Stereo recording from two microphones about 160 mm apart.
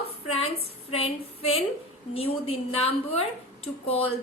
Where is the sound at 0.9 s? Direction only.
40° left (ahead or behind).